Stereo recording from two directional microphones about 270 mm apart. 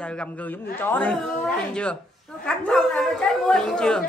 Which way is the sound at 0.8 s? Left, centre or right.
Centre.